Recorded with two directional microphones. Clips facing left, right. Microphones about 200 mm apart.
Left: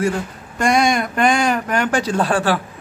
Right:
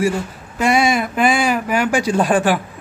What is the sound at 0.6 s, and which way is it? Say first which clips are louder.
Speech: right 1 dB; 5° right (ahead or behind).